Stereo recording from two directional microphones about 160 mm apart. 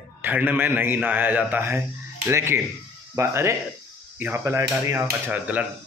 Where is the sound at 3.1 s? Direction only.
15° right (ahead or behind).